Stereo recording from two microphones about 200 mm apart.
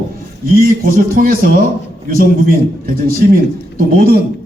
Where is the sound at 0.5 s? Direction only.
45° right (ahead or behind).